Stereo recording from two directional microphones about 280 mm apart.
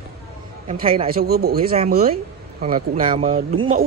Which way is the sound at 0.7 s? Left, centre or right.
Right.